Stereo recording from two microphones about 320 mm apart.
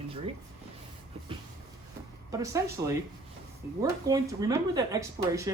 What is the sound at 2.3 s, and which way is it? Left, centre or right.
Speech, centre.